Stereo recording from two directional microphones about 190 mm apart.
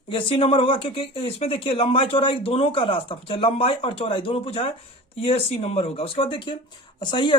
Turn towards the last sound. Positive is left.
turn(degrees=25)  # may be behind; listen again after turning